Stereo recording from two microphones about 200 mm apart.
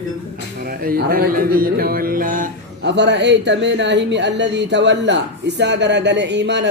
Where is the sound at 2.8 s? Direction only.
60° right (ahead or behind).